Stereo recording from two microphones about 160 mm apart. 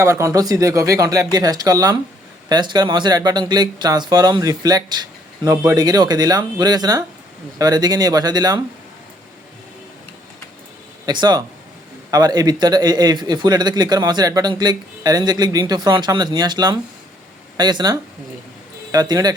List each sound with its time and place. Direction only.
0.0 s a man's voice: 15° right (ahead or behind)
11.0 s a man's voice: 25° right (ahead or behind)